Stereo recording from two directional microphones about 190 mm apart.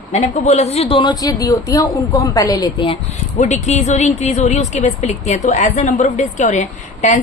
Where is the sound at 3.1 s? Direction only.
40° left (ahead or behind).